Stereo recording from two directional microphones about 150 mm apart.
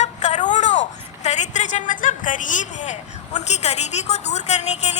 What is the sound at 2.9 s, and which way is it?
A woman's voice, 50° left (ahead or behind).